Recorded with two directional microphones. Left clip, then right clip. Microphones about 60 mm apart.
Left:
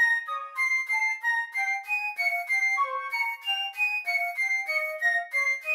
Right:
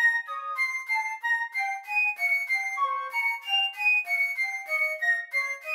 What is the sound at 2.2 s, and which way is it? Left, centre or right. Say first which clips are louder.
Music: even; left.